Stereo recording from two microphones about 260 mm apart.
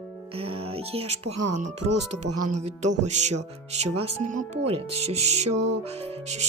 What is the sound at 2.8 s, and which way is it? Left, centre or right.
Speech, right.